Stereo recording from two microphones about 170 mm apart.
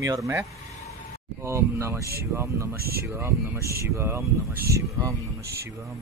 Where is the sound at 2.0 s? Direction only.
65° right (ahead or behind).